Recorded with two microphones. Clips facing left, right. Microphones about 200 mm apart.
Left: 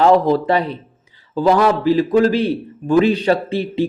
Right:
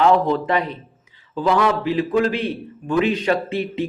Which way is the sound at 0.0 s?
35° left (ahead or behind).